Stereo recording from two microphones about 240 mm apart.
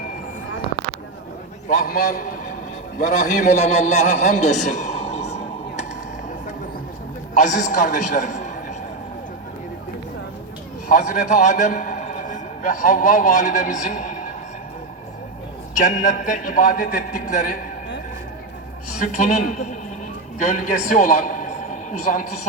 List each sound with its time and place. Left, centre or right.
1.6 s a man's voice: left
4.8 s a sound: left
7.3 s a man's voice: left
10.8 s a man's voice: left
15.7 s a man's voice: left
18.9 s a man's voice: left